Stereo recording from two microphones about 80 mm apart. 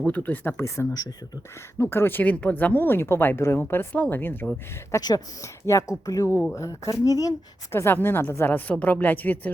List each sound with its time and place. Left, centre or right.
0.1 s speech: left
1.8 s speech: left
4.9 s speech: left
7.7 s speech: left